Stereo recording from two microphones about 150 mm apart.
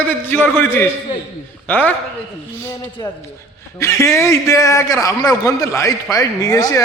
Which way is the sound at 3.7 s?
20° left (ahead or behind).